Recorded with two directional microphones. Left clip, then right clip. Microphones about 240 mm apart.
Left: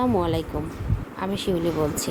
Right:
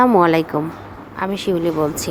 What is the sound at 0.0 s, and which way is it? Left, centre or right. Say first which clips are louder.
A woman's voice: right 10 dB; centre.